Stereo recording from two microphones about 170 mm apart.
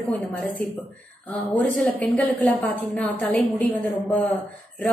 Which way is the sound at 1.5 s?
10° left (ahead or behind).